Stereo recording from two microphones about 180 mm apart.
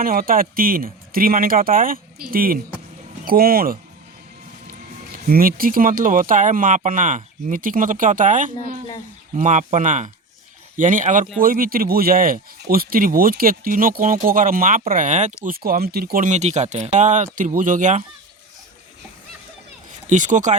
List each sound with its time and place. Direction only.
0.0 s speech: 55° right (ahead or behind)
5.1 s speech: 55° right (ahead or behind)
20.1 s speech: 45° right (ahead or behind)